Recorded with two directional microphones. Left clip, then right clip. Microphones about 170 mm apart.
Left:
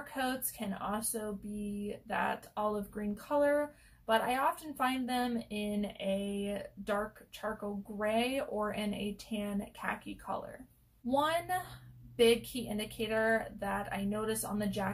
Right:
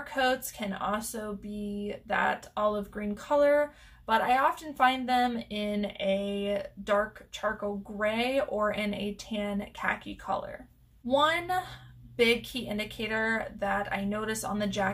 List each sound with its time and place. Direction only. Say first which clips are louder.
0.1 s speech: right 9 dB; 20° right (ahead or behind)
8.0 s speech: right 5 dB; 15° right (ahead or behind)